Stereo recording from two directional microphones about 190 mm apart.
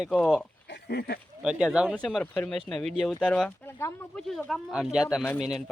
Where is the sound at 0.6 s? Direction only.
60° left (ahead or behind).